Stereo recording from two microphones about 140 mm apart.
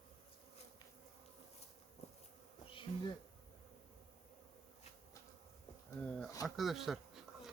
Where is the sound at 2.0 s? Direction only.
50° left (ahead or behind).